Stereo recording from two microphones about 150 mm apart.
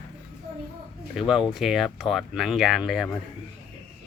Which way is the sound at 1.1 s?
5° right (ahead or behind).